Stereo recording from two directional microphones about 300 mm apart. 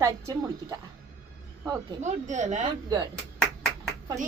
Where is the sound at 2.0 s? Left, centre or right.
Right.